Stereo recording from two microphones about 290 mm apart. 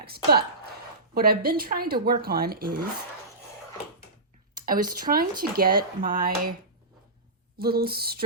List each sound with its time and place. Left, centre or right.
0.0 s speech: right
4.6 s speech: right
7.6 s speech: right